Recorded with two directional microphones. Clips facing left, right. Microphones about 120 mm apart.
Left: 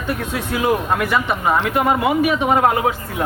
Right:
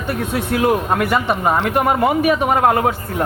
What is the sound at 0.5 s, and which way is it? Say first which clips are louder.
Speech: right 2 dB; 50° right (ahead or behind).